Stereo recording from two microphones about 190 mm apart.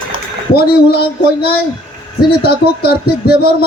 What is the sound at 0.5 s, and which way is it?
Speech, 55° left (ahead or behind).